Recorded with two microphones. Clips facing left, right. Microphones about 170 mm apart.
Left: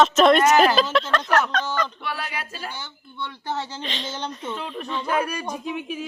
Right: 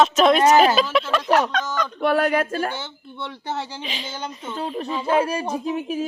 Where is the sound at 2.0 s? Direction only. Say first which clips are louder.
Right 13 dB; 50° right (ahead or behind).